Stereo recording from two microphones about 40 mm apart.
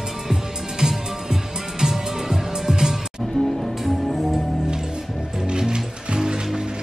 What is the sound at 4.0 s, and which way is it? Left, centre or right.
Music, centre.